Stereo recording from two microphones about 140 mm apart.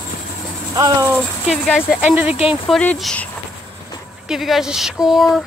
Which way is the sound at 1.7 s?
5° right (ahead or behind).